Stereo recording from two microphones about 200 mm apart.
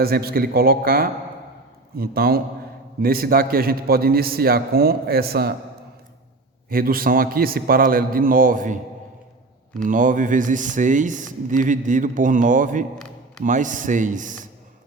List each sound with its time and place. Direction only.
0.0 s a man's voice: 50° right (ahead or behind)
6.7 s a man's voice: 45° right (ahead or behind)
9.8 s speech: 40° right (ahead or behind)